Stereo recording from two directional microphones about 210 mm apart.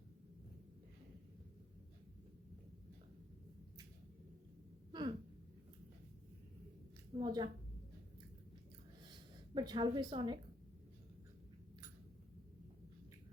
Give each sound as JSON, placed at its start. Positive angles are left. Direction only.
{"t": 4.9, "sound": "a sound", "side_deg": -20}
{"t": 7.2, "sound": "a woman's voice", "side_deg": -25}
{"t": 9.6, "sound": "a woman's voice", "side_deg": -20}